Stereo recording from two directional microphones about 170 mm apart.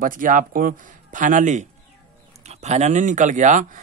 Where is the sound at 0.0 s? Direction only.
50° right (ahead or behind).